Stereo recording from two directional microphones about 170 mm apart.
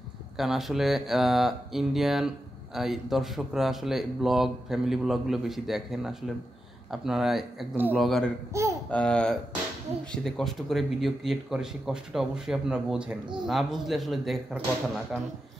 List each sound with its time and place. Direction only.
0.4 s speech: centre (ahead or behind)
8.5 s a child's voice: 15° right (ahead or behind)
8.9 s speech: 5° left (ahead or behind)